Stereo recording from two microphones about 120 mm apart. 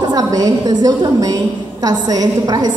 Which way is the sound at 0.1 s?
30° right (ahead or behind).